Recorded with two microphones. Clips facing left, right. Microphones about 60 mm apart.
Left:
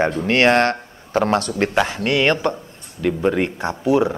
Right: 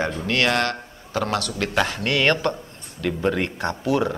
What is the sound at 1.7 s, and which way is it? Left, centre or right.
A man's voice, centre.